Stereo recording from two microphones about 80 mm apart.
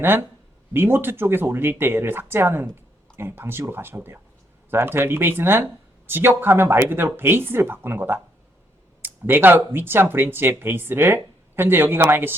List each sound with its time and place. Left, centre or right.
0.0 s speech: right